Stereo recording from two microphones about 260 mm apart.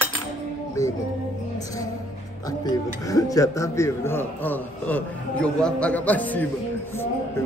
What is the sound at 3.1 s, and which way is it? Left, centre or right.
A man's voice, centre.